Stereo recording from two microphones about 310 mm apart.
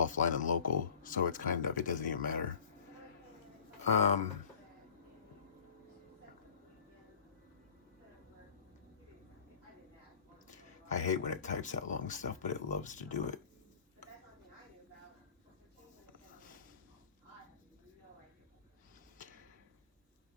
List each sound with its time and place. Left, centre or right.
0.0 s speech: left
3.9 s speech: left
10.3 s speech: left